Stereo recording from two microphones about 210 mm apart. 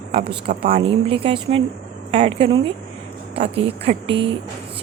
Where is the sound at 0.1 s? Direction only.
30° right (ahead or behind).